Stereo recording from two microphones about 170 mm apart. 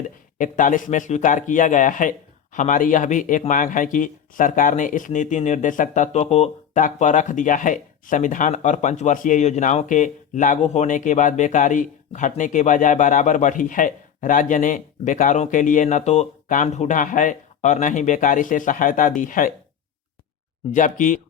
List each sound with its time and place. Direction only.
0.3 s speech: 50° left (ahead or behind)
20.7 s speech: 50° left (ahead or behind)